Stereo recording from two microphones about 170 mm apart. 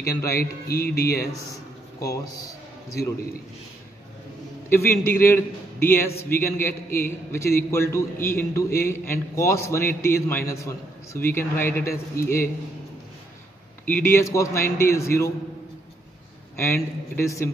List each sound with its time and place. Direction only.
0.1 s a man's voice: 15° left (ahead or behind)
0.7 s speech: 65° left (ahead or behind)
2.0 s speech: 20° left (ahead or behind)
4.6 s a man's voice: 15° left (ahead or behind)
14.0 s a man's voice: 15° left (ahead or behind)
16.5 s a man's voice: 15° left (ahead or behind)